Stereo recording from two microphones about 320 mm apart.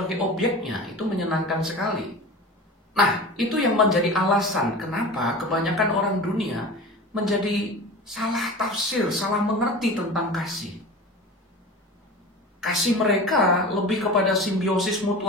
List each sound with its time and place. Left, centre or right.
0.0 s speech: centre
2.9 s speech: centre
8.1 s speech: centre
12.5 s speech: centre